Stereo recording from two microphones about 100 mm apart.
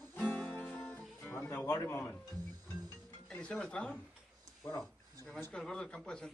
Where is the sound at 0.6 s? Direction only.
15° left (ahead or behind).